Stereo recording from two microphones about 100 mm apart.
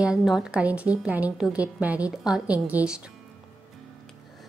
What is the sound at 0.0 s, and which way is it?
A woman's voice, 5° right (ahead or behind).